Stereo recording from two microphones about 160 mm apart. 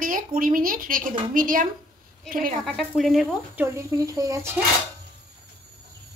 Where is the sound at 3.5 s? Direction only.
20° right (ahead or behind).